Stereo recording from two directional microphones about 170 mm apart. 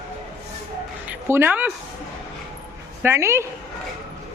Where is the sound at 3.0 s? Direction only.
15° right (ahead or behind).